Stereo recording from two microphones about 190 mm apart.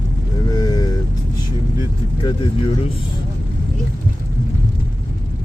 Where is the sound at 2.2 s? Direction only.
25° left (ahead or behind).